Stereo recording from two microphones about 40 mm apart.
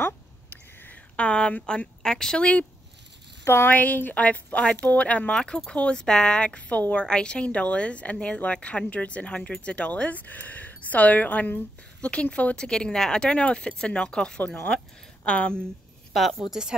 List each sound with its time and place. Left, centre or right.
0.0 s a sound: left
1.1 s speech: left
2.0 s speech: centre
3.4 s speech: left
3.7 s speech: left
4.6 s speech: left
4.8 s speech: left
5.3 s speech: centre; by 11.6 s left
12.0 s speech: left
12.5 s speech: centre
16.1 s a woman's voice: centre